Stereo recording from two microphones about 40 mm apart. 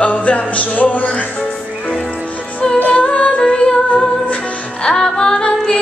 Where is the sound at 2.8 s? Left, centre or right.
Left.